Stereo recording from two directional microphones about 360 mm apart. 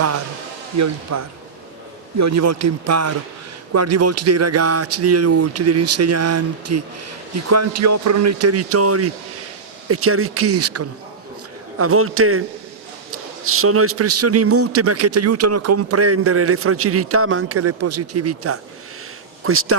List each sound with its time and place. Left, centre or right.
0.8 s a man's voice: right